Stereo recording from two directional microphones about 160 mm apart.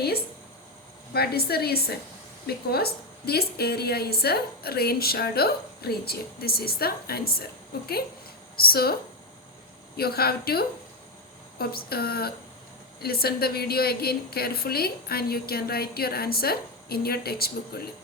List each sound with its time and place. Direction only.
1.1 s a woman's voice: 80° left
8.5 s a woman's voice: 70° left (ahead or behind)
10.0 s a woman's voice: 75° left (ahead or behind)